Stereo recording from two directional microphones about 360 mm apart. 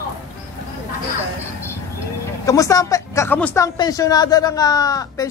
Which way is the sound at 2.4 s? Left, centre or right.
Centre.